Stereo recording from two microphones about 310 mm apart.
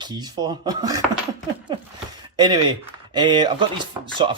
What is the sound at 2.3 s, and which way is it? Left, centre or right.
Speech, centre.